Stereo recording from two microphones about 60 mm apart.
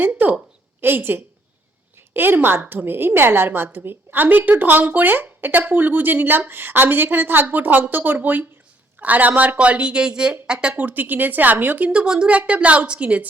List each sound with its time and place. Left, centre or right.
0.0 s a woman's voice: right; by 10.8 s centre
10.8 s a woman's voice: right